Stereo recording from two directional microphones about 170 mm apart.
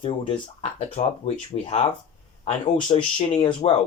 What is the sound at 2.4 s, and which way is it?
Speech, 30° left (ahead or behind).